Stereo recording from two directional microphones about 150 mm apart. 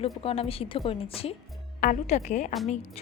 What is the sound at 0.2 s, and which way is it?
Speech, 40° left (ahead or behind).